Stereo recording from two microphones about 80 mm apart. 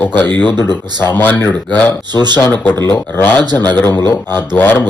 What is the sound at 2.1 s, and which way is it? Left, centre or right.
Speech, right.